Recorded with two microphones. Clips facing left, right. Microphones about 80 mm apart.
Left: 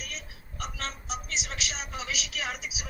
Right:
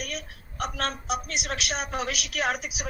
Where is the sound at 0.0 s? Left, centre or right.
Right.